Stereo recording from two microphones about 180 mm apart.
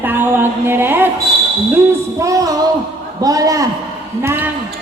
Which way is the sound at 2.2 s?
20° right (ahead or behind).